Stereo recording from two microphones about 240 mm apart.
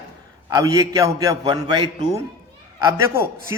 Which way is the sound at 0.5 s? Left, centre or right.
Centre.